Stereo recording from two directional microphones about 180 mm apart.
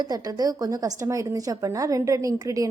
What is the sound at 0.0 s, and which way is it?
A woman's voice, 20° right (ahead or behind).